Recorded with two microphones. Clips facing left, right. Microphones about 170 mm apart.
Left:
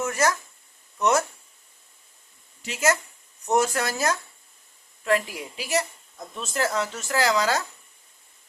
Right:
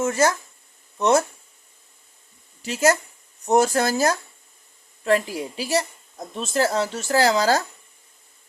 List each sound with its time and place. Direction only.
0.0 s speech: 30° right (ahead or behind)
2.6 s a woman's voice: 35° right (ahead or behind)